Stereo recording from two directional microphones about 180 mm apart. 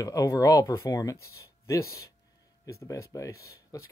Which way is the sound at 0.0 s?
20° left (ahead or behind).